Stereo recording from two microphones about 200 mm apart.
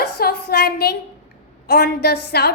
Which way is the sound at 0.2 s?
50° left (ahead or behind).